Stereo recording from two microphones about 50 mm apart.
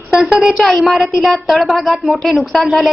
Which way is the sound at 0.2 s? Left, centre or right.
Centre.